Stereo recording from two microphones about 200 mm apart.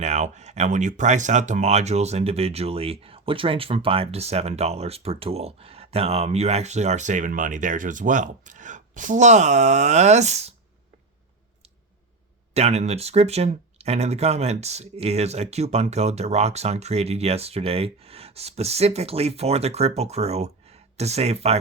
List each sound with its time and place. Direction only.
0.0 s speech: 35° right (ahead or behind)
12.5 s speech: 35° right (ahead or behind)